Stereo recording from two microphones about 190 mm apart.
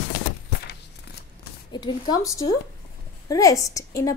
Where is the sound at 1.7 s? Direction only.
25° left (ahead or behind).